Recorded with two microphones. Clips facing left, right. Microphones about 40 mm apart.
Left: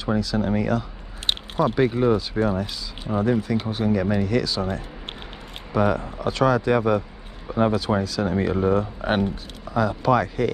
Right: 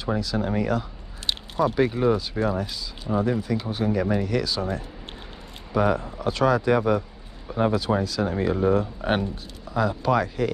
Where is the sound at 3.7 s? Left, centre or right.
Centre.